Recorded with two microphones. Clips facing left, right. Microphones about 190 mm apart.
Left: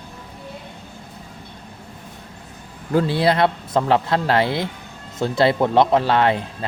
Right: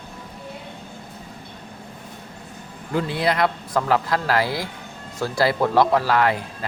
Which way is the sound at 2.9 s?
30° left (ahead or behind).